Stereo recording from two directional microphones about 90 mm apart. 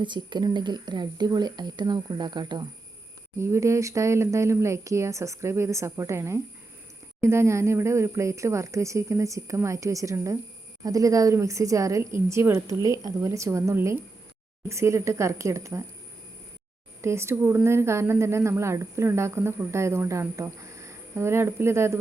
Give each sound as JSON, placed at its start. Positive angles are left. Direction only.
{"t": 0.0, "sound": "speech", "side_deg": -60}
{"t": 3.3, "sound": "speech", "side_deg": -30}
{"t": 17.0, "sound": "speech", "side_deg": -30}